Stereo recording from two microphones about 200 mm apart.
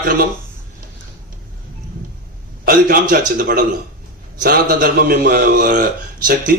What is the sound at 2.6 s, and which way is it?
A man's voice, 45° right (ahead or behind).